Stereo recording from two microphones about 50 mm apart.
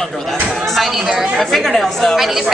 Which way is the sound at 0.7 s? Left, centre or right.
Centre.